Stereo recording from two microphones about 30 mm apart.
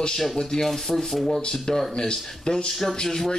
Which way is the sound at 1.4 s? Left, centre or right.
Left.